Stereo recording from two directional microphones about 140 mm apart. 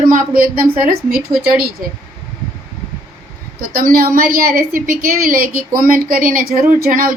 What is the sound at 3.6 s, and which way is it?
A woman's voice, 90° right.